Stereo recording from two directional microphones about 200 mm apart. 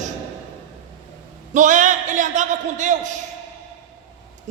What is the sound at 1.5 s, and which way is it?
A man's voice, 40° right (ahead or behind).